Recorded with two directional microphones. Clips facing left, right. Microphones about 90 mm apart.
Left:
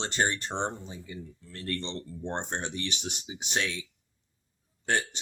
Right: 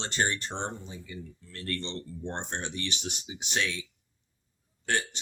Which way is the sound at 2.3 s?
15° left (ahead or behind).